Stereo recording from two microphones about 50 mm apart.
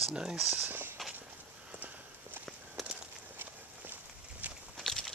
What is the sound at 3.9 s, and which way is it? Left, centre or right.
Walk, right.